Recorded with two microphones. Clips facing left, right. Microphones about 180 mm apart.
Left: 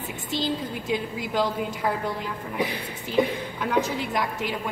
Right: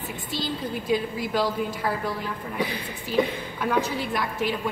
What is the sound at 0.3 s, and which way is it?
A woman's voice, 20° left (ahead or behind).